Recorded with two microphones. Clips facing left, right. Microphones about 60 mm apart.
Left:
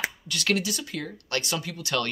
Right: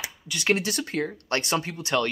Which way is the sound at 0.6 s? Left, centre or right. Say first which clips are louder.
Right 3 dB; right.